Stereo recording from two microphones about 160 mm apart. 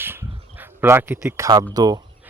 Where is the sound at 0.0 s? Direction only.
15° right (ahead or behind).